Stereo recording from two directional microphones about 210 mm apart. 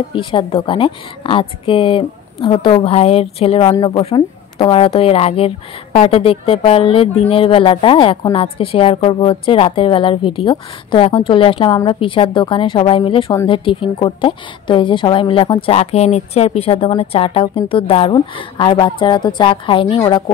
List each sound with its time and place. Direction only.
0.1 s speech: 25° left (ahead or behind)